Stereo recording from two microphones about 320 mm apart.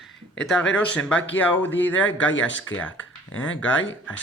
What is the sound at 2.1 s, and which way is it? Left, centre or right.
Speech, left.